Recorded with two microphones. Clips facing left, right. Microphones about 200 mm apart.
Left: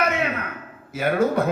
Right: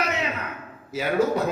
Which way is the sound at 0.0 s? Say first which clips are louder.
Left 4 dB; 55° left (ahead or behind).